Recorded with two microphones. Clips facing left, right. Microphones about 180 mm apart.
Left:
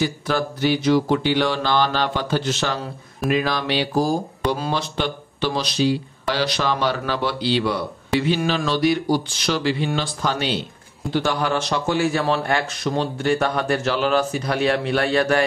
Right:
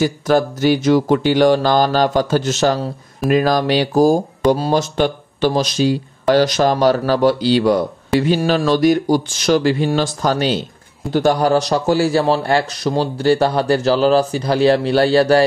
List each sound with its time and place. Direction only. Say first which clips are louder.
0.0 s a man's voice: right 7 dB; 45° right (ahead or behind)